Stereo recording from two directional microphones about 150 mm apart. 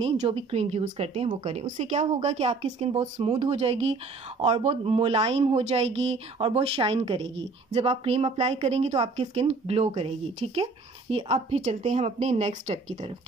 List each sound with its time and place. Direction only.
0.0 s a woman's voice: 40° right (ahead or behind)